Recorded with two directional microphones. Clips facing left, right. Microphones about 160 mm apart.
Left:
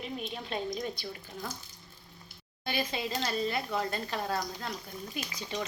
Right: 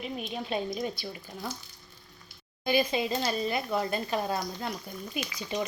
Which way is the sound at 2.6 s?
15° right (ahead or behind).